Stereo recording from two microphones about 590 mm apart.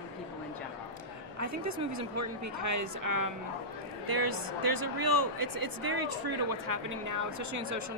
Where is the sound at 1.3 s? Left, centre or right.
Right.